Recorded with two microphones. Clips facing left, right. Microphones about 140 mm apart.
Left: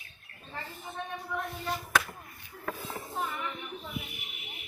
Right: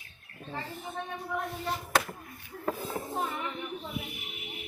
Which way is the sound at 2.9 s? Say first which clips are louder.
Right 3 dB; 35° right (ahead or behind).